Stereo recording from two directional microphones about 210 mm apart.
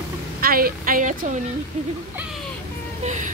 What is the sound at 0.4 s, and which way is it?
A woman's voice, 45° right (ahead or behind).